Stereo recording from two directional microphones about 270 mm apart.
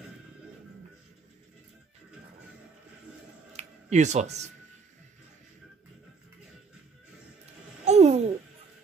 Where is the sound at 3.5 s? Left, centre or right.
Right.